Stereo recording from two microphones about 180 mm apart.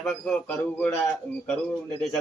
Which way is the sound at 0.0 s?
5° left (ahead or behind).